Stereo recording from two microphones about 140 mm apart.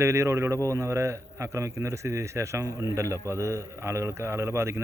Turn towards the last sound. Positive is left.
turn(degrees=-20)  # may be behind; listen again after turning